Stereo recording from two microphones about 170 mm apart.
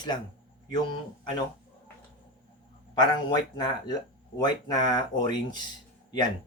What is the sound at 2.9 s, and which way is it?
Speech, 25° left (ahead or behind).